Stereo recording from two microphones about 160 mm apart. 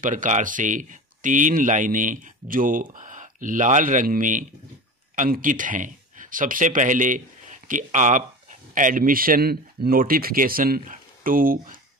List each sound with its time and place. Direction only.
0.0 s speech: 55° right (ahead or behind)